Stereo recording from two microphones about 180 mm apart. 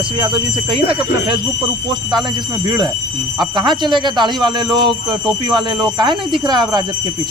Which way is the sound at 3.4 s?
25° right (ahead or behind).